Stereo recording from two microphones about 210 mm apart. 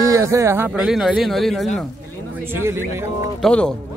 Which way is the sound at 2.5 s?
10° right (ahead or behind).